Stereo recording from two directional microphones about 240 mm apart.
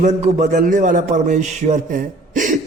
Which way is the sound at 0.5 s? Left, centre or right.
Right.